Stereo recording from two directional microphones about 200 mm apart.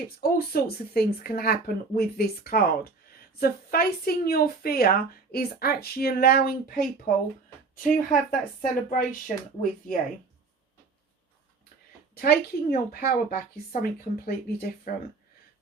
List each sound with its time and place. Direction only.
0.2 s speech: 50° left (ahead or behind)
12.2 s speech: 50° left (ahead or behind)